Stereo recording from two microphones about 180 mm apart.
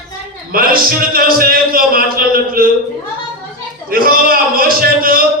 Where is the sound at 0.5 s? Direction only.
55° right (ahead or behind).